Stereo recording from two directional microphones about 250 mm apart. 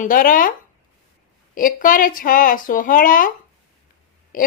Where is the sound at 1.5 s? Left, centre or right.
Left.